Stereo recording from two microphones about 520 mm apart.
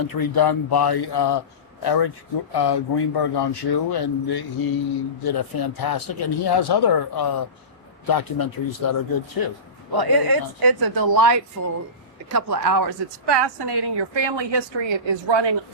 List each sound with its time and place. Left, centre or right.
0.0 s speech: left
9.9 s a woman's voice: right